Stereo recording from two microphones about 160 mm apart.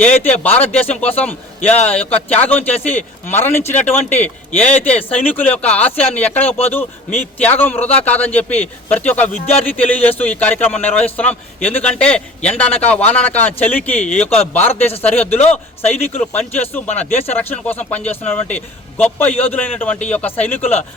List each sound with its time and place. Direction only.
0.0 s a man's voice: 10° left (ahead or behind)
16.9 s speech: 45° left (ahead or behind)
17.3 s a man's voice: 10° left (ahead or behind)